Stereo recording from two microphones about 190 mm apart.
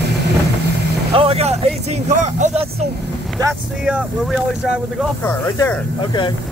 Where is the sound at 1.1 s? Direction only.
30° right (ahead or behind).